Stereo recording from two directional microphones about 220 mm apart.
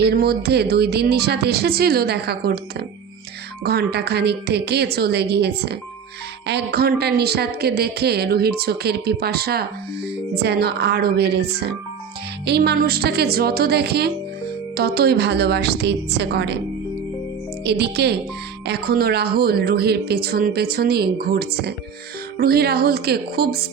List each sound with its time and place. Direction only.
0.0 s a woman's voice: 45° right (ahead or behind)
17.6 s a woman's voice: 50° right (ahead or behind)